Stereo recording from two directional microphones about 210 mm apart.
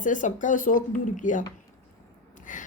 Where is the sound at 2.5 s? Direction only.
40° left (ahead or behind).